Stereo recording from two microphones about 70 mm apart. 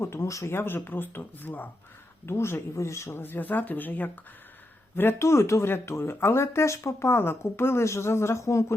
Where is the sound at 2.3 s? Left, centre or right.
Left.